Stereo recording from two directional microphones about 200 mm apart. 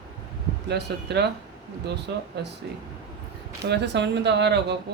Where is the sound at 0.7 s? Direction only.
55° right (ahead or behind).